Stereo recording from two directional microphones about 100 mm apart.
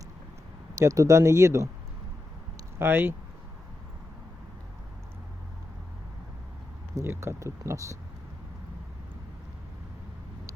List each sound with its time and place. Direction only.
0.8 s speech: 35° right (ahead or behind)
2.7 s speech: 20° right (ahead or behind)
6.9 s speech: 30° right (ahead or behind)